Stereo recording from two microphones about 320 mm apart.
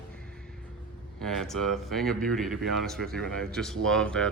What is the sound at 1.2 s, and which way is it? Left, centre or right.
Speech, centre.